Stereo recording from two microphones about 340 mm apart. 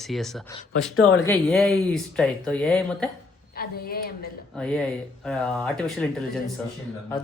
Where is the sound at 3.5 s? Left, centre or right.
Left.